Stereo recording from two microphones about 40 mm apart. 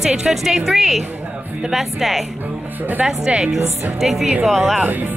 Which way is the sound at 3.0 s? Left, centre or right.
Right.